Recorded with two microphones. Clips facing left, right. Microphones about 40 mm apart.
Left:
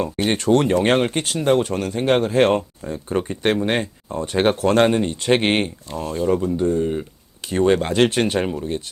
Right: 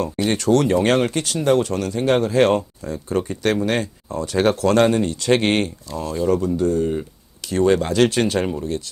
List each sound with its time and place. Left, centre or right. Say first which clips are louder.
0.2 s speech: even; left
6.6 s speech: even; left
7.4 s speech: even; left